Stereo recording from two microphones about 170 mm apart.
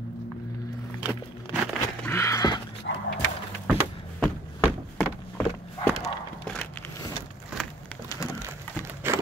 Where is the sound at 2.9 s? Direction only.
80° left.